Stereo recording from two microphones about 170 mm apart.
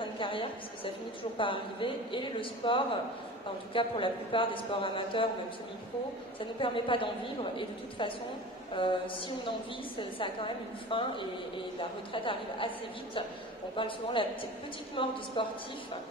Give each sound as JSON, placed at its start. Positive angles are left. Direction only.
{"t": 0.0, "sound": "a sound", "side_deg": 30}
{"t": 1.4, "sound": "a man's voice", "side_deg": 30}
{"t": 6.6, "sound": "a man's voice", "side_deg": 30}
{"t": 13.7, "sound": "a man's voice", "side_deg": 30}